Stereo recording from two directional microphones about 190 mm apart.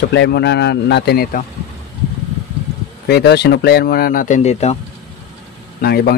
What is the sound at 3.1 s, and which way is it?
Speech, 60° left (ahead or behind).